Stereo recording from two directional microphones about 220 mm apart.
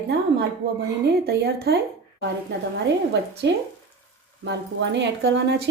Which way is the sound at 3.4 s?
50° right (ahead or behind).